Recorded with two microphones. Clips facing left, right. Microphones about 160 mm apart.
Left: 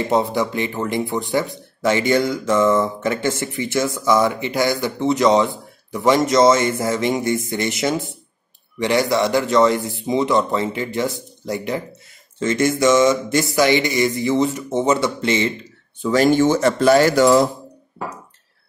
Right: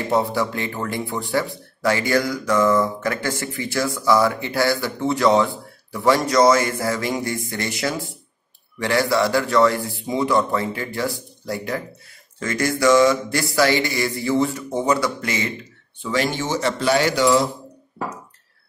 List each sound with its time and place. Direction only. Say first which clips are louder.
0.1 s speech: even; 20° left (ahead or behind)
16.0 s speech: left 8 dB; 40° left (ahead or behind)